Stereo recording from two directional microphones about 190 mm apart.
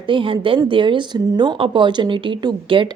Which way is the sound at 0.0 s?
25° right (ahead or behind).